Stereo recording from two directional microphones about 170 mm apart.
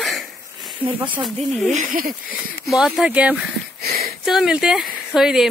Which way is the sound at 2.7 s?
Centre (ahead or behind).